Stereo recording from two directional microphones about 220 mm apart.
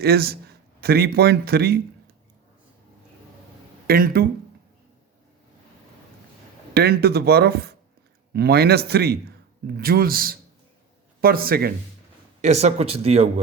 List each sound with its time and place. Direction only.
0.0 s speech: 45° right (ahead or behind)
3.8 s speech: 40° right (ahead or behind)
6.7 s speech: 45° right (ahead or behind)
12.4 s a man's voice: 30° right (ahead or behind)